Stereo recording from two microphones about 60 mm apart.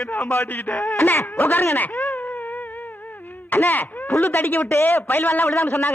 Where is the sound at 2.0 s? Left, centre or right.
Left.